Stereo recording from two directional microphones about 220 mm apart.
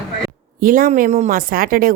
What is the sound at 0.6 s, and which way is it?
A woman's voice, 40° right (ahead or behind).